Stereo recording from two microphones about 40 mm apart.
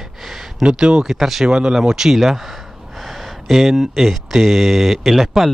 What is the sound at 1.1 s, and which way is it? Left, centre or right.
Speech, centre.